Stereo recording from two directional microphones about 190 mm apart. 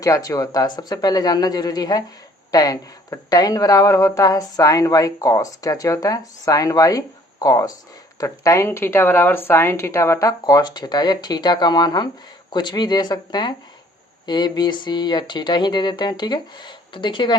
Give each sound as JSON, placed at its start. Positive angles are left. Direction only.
{"t": 0.0, "sound": "speech", "side_deg": 20}